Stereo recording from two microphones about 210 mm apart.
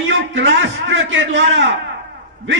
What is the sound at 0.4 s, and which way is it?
A man's voice, 60° right (ahead or behind).